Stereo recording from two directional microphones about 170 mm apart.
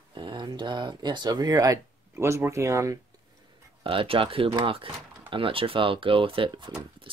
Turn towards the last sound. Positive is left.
turn(degrees=-25)  # may be behind; listen again after turning